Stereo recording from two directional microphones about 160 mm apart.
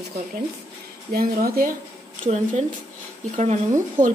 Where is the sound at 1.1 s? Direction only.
70° right (ahead or behind).